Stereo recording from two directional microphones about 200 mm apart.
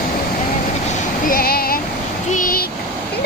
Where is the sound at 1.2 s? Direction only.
50° left (ahead or behind).